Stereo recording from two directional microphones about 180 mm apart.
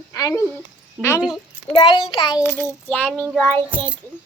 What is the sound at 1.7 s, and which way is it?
Speech, 30° left (ahead or behind).